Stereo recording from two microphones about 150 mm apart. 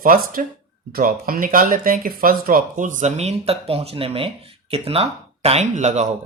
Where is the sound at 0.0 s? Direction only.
70° right (ahead or behind).